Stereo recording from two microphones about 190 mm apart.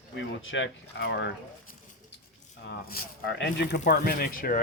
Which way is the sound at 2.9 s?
60° left (ahead or behind).